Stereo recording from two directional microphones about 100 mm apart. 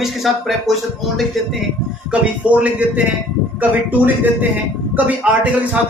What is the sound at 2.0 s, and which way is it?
A man's voice, 15° right (ahead or behind).